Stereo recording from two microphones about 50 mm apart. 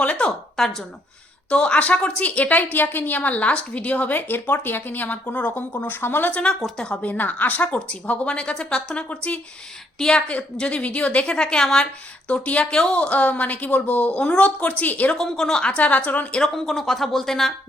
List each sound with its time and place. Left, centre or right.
0.0 s a sound: left
0.3 s a woman's voice: centre
1.5 s a woman's voice: left
2.7 s a woman's voice: left
5.5 s speech: left
6.7 s a woman's voice: left
7.1 s a woman's voice: left
10.0 s a woman's voice: centre
12.3 s a woman's voice: left
15.1 s a woman's voice: centre
15.6 s a woman's voice: left
16.4 s speech: centre